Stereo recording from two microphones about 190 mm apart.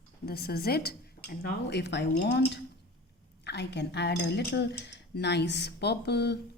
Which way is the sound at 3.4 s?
65° left (ahead or behind).